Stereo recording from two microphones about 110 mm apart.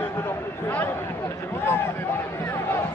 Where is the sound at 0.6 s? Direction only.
15° left (ahead or behind).